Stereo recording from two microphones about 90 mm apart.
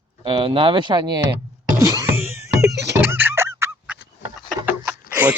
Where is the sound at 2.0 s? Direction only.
30° right (ahead or behind).